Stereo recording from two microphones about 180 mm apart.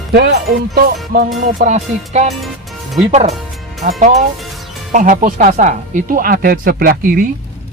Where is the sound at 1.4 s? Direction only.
40° right (ahead or behind).